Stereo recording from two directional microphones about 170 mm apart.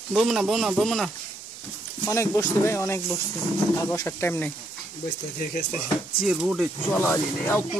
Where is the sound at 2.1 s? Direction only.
20° left (ahead or behind).